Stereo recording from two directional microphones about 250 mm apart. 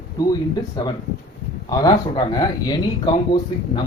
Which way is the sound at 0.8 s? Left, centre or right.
Centre.